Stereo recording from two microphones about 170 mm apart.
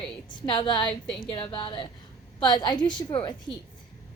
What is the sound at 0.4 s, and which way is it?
A woman's voice, 30° left (ahead or behind).